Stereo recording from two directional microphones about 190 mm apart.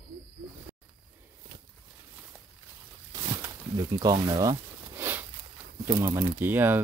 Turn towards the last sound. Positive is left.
turn(degrees=-10)  # may be behind; listen again after turning